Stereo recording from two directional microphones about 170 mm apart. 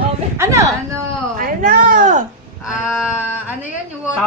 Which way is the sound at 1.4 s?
55° right (ahead or behind).